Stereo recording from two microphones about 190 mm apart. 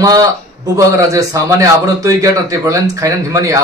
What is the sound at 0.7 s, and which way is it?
A man's voice, 15° right (ahead or behind).